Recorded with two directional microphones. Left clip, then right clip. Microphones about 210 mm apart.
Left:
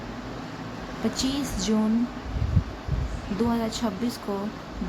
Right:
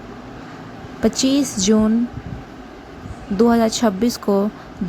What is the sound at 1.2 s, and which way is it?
Speech, 30° right (ahead or behind).